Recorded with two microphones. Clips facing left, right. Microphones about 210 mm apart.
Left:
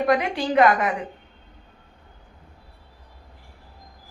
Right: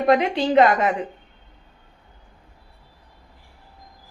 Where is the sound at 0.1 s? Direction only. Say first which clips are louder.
Right 6 dB; 25° right (ahead or behind).